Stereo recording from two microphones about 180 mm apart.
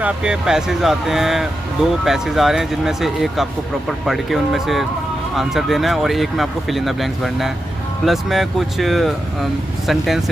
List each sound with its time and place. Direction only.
0.0 s speech: 5° right (ahead or behind)